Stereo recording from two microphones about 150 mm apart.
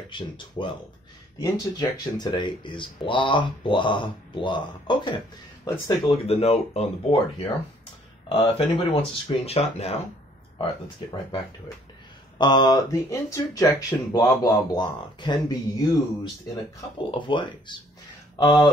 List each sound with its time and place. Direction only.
0.1 s speech: 35° left (ahead or behind)
10.6 s speech: 30° left (ahead or behind)
17.1 s speech: 35° left (ahead or behind)